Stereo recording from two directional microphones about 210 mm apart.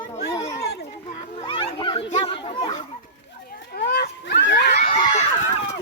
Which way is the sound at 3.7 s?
50° left (ahead or behind).